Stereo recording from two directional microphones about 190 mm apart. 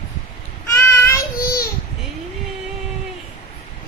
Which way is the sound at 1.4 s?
50° left (ahead or behind).